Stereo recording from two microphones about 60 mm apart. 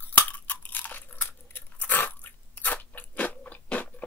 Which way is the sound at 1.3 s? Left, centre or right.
Left.